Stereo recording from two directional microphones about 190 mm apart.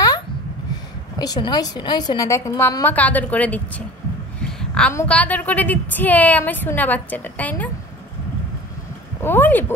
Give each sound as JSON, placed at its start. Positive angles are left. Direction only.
{"t": 1.1, "sound": "a woman's voice", "side_deg": 20}
{"t": 4.4, "sound": "a sound", "side_deg": 5}
{"t": 4.9, "sound": "a woman's voice", "side_deg": 5}
{"t": 9.2, "sound": "a woman's voice", "side_deg": 10}